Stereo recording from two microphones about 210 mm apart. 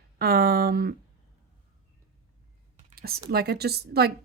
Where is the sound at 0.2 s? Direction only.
45° right (ahead or behind).